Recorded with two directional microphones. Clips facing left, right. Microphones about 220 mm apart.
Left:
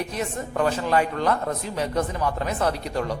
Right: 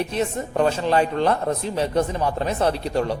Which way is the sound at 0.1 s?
25° right (ahead or behind).